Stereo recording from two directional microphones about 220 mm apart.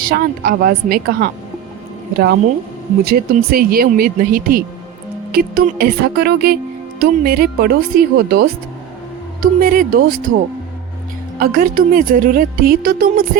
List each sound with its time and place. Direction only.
0.0 s a woman's voice: 40° right (ahead or behind)
11.3 s a woman's voice: 40° right (ahead or behind)